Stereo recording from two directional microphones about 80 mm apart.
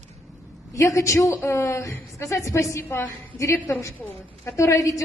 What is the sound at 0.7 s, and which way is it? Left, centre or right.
A woman's voice, left.